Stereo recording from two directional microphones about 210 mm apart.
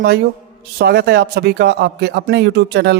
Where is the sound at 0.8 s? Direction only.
50° right (ahead or behind).